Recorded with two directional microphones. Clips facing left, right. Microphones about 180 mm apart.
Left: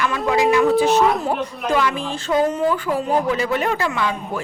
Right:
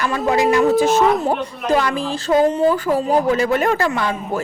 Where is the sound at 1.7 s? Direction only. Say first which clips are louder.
Right 2 dB; 40° right (ahead or behind).